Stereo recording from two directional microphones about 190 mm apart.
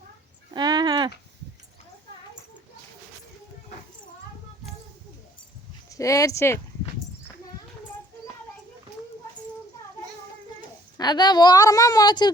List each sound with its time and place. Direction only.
0.5 s a sound: 20° right (ahead or behind)
5.9 s speech: 15° left (ahead or behind)
10.9 s speech: 20° left (ahead or behind)